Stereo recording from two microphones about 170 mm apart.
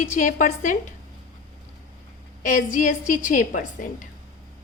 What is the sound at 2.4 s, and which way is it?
A woman's voice, 50° left (ahead or behind).